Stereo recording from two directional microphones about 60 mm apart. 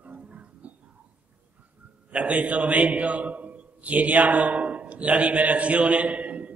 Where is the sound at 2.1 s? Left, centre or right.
Right.